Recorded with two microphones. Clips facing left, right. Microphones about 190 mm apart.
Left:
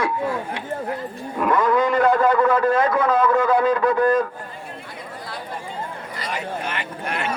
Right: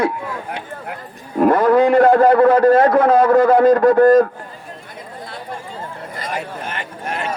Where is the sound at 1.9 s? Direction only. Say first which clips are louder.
Right 6 dB; 45° right (ahead or behind).